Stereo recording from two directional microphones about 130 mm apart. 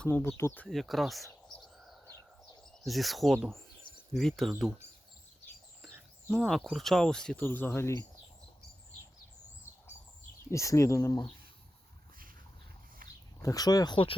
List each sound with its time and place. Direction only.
0.0 s speech: 10° left (ahead or behind)
0.7 s speech: centre (ahead or behind)
6.3 s speech: centre (ahead or behind); by 8.0 s 20° left (ahead or behind)
10.5 s speech: 25° left (ahead or behind)
13.0 s a sound: 90° right
13.4 s speech: 25° left (ahead or behind)